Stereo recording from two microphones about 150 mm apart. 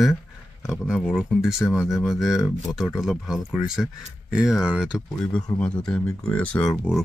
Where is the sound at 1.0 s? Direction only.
5° right (ahead or behind).